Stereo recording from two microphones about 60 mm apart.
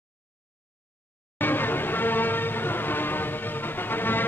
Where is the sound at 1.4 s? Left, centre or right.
Left.